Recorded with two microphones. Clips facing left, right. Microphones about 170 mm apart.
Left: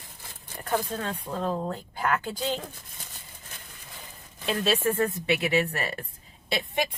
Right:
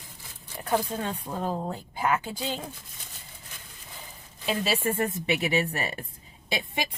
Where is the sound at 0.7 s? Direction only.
10° right (ahead or behind).